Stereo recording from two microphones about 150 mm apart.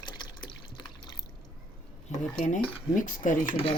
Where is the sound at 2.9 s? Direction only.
60° left (ahead or behind).